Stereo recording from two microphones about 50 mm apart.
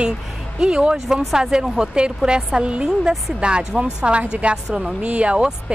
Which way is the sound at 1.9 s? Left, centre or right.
Centre.